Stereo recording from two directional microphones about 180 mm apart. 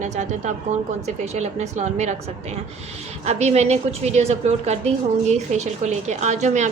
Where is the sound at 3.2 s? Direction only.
35° right (ahead or behind).